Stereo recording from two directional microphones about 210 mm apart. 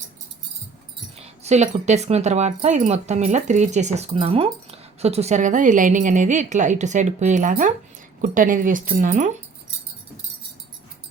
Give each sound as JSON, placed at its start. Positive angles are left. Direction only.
{"t": 1.2, "sound": "speech", "side_deg": -30}